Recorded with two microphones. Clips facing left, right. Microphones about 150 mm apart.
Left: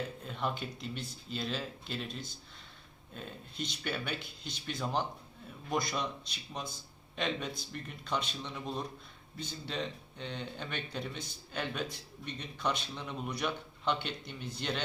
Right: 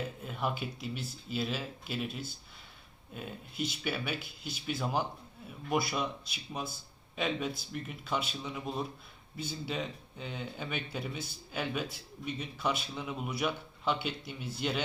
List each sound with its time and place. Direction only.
0.2 s speech: 5° right (ahead or behind)